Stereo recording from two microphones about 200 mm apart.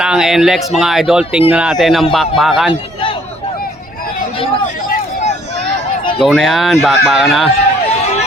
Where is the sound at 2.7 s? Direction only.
25° left (ahead or behind).